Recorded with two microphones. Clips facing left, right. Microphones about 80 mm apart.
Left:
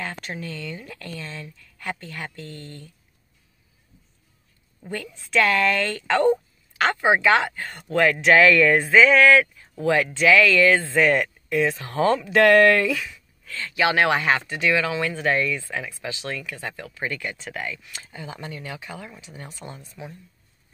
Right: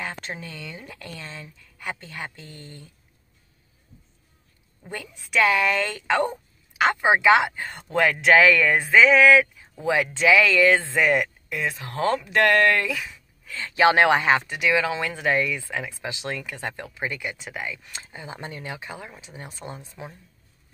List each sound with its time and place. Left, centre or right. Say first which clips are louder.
0.0 s speech: left 1 dB; right
4.8 s speech: left 3 dB; centre
11.0 s speech: left 2 dB; centre
13.0 s speech: left 1 dB; right
17.8 s speech: left 1 dB; right